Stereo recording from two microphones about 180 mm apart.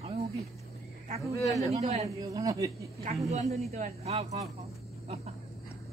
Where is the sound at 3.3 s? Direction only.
35° right (ahead or behind).